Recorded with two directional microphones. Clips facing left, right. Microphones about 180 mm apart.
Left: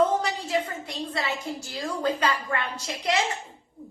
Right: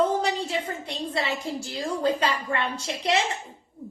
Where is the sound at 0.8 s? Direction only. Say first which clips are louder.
Right 2 dB; 30° right (ahead or behind).